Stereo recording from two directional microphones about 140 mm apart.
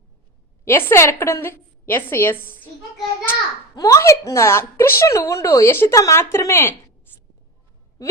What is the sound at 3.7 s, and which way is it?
A woman's voice, 25° left (ahead or behind).